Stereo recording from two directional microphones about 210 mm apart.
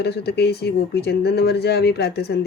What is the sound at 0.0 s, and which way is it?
Speech, 50° left (ahead or behind).